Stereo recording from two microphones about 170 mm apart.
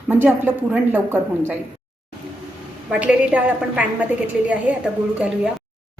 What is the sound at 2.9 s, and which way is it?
A woman's voice, 5° right (ahead or behind).